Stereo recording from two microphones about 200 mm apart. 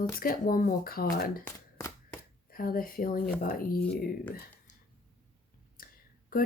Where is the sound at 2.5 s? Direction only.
45° left (ahead or behind).